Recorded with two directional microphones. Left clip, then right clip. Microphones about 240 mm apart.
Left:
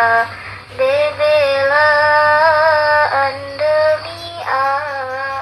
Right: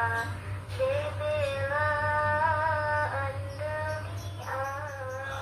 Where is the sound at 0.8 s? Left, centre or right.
Left.